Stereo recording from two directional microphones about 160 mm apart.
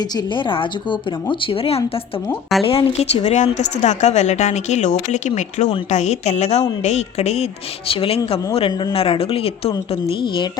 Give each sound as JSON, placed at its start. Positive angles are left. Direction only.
{"t": 0.0, "sound": "a woman's voice", "side_deg": 25}